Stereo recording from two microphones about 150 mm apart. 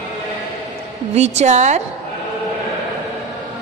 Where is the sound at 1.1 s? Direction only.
45° right (ahead or behind).